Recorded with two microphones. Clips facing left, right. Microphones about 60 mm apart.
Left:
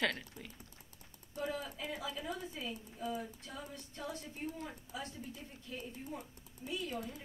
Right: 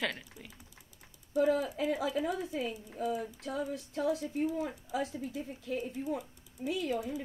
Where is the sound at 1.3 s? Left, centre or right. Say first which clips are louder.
Right 12 dB; right.